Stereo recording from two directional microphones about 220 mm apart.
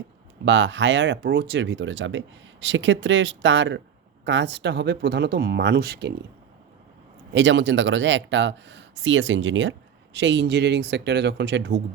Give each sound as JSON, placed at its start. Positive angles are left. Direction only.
{"t": 0.4, "sound": "speech", "side_deg": -55}
{"t": 7.3, "sound": "speech", "side_deg": -55}